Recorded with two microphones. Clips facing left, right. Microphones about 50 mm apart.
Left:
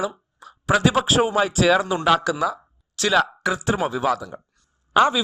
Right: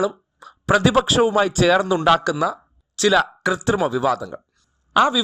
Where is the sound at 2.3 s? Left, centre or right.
Centre.